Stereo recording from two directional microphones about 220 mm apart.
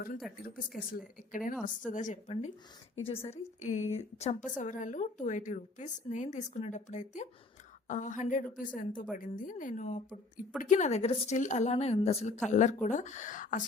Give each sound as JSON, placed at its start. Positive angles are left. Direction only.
{"t": 0.9, "sound": "a woman's voice", "side_deg": 40}